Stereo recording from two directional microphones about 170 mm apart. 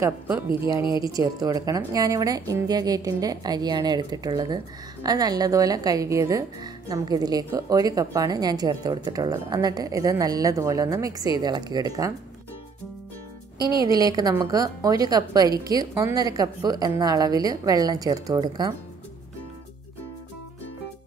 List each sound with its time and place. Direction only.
1.1 s speech: 20° right (ahead or behind)
13.6 s speech: 20° right (ahead or behind)